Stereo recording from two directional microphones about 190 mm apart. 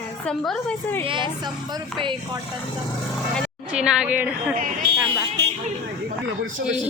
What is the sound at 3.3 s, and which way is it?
Speech, 5° right (ahead or behind).